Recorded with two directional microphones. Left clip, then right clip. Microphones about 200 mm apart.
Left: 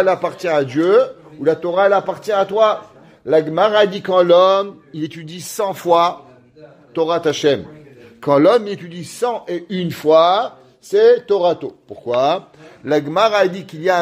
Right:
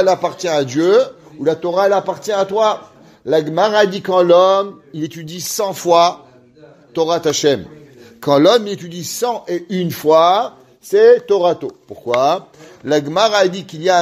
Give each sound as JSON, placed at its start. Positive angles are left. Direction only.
{"t": 0.0, "sound": "a man's voice", "side_deg": -30}
{"t": 12.8, "sound": "a man's voice", "side_deg": -20}